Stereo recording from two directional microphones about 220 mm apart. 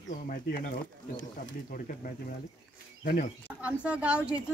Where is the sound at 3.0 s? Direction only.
40° left (ahead or behind).